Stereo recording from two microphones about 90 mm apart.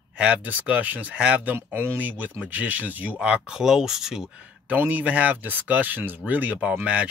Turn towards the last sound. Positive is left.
turn(degrees=-15)  # may be behind; listen again after turning